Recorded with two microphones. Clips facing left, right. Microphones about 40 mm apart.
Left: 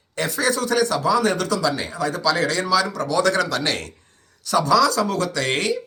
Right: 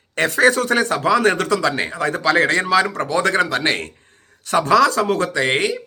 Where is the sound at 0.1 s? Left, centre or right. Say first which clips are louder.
Right 7 dB; right.